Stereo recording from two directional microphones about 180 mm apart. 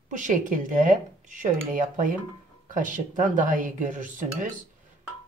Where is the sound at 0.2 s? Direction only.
45° right (ahead or behind).